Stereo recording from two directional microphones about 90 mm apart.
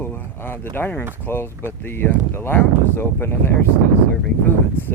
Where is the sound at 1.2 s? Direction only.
25° left (ahead or behind).